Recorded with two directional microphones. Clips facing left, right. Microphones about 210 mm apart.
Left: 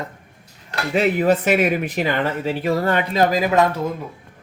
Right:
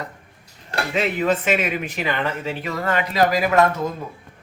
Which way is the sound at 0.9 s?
35° left (ahead or behind).